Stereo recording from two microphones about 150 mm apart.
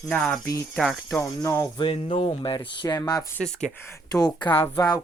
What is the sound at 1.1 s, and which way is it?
Speech, 15° left (ahead or behind).